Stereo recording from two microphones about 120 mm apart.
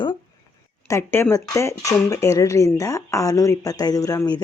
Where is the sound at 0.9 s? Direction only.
20° left (ahead or behind).